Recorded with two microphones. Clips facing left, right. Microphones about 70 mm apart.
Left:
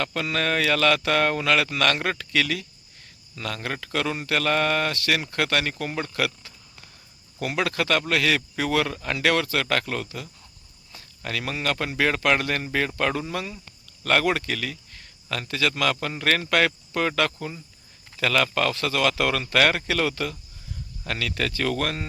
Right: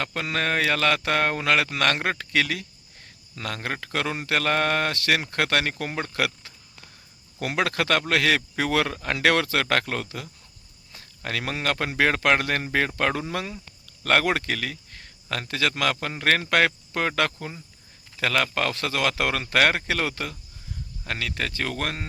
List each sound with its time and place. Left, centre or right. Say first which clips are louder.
0.0 s a man's voice: left 1 dB; right
21.1 s a man's voice: left 2 dB; right